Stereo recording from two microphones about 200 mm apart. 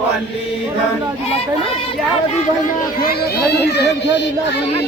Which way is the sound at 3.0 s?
50° left (ahead or behind).